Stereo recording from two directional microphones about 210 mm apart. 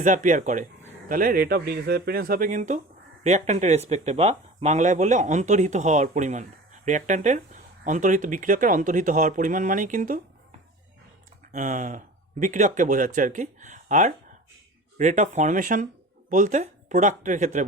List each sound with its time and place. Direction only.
0.0 s speech: 40° right (ahead or behind)
11.5 s speech: 35° right (ahead or behind)